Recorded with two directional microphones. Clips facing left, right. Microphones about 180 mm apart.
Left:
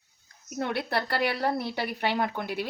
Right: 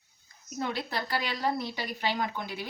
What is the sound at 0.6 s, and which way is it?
A woman's voice, 65° left (ahead or behind).